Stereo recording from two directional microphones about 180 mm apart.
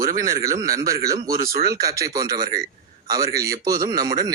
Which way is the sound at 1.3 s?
55° right (ahead or behind).